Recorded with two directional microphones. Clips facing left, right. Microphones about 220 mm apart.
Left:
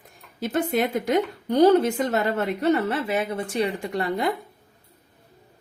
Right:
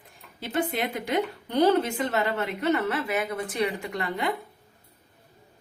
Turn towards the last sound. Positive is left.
turn(degrees=35)  # may be behind; listen again after turning